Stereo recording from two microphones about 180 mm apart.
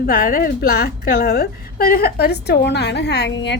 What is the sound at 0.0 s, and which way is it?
A woman's voice, 55° left (ahead or behind).